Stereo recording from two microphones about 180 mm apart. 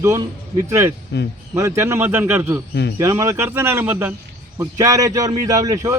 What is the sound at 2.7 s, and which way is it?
Speech, 70° left (ahead or behind).